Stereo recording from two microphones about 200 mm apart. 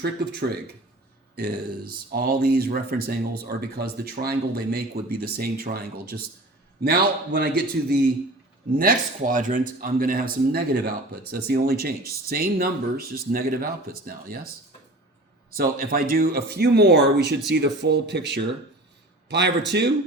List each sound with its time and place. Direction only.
1.4 s speech: 50° right (ahead or behind)
15.4 s speech: 45° right (ahead or behind)